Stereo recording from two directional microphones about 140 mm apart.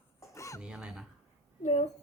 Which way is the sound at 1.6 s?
50° left (ahead or behind).